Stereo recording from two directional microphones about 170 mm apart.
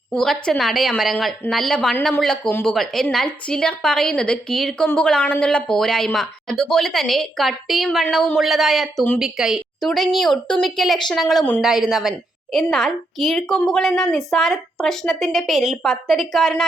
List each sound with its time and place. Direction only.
0.1 s a woman's voice: 5° left (ahead or behind)